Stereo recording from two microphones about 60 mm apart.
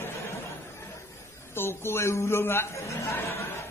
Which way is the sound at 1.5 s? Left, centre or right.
Left.